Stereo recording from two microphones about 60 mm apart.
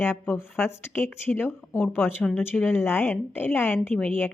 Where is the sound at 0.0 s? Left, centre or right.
Left.